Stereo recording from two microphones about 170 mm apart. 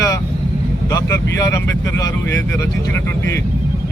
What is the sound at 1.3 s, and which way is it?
Speech, 20° left (ahead or behind).